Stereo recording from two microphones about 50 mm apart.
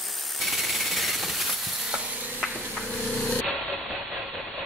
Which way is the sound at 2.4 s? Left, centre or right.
Centre.